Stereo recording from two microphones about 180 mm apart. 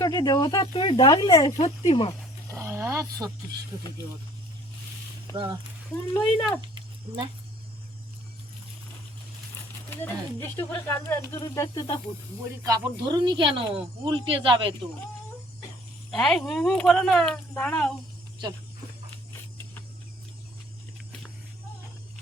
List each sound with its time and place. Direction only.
0.0 s speech: 20° left (ahead or behind)
2.5 s a sound: 15° right (ahead or behind)
5.3 s speech: 25° right (ahead or behind)
6.2 s speech: centre (ahead or behind)
7.1 s speech: 30° right (ahead or behind)
10.0 s speech: 15° left (ahead or behind)
12.6 s speech: 25° right (ahead or behind)
16.1 s speech: 5° left (ahead or behind)